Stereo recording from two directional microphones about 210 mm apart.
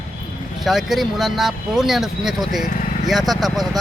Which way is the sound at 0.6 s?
Centre (ahead or behind).